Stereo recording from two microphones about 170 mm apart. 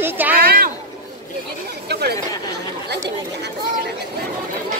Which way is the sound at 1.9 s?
70° right (ahead or behind).